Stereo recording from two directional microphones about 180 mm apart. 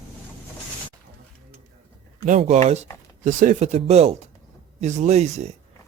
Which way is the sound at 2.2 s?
40° right (ahead or behind).